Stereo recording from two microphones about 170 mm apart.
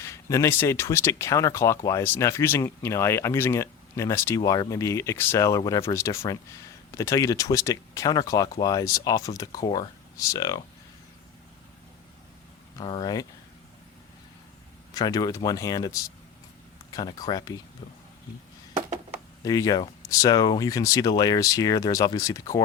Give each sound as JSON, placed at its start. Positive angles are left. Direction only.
{"t": 0.0, "sound": "speech", "side_deg": 15}
{"t": 12.8, "sound": "speech", "side_deg": 25}
{"t": 14.9, "sound": "speech", "side_deg": 25}
{"t": 19.5, "sound": "speech", "side_deg": 20}